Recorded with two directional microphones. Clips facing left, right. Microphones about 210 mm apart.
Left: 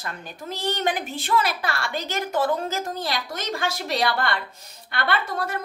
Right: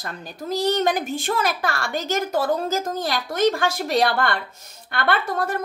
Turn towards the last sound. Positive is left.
turn(degrees=-50)  # may be behind; listen again after turning